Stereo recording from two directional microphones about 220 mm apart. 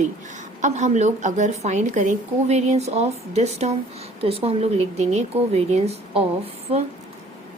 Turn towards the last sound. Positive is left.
turn(degrees=-25)  # may be behind; listen again after turning